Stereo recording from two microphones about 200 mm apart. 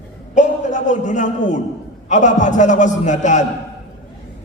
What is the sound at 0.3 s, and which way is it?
A man's voice, 40° left (ahead or behind).